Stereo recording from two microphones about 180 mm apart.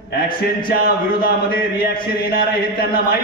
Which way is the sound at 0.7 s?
55° left (ahead or behind).